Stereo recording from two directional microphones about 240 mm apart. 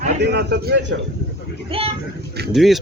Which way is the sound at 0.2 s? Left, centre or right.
Right.